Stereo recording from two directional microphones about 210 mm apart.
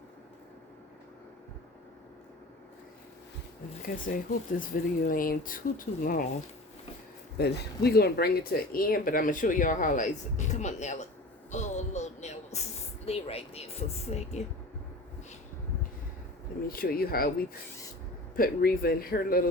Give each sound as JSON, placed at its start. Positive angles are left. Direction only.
{"t": 3.8, "sound": "speech", "side_deg": 40}
{"t": 7.3, "sound": "speech", "side_deg": 50}
{"t": 11.5, "sound": "a sound", "side_deg": 35}
{"t": 13.1, "sound": "speech", "side_deg": 30}
{"t": 16.6, "sound": "speech", "side_deg": 45}